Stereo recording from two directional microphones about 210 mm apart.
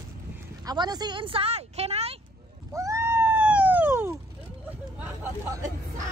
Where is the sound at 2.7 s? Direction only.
15° right (ahead or behind).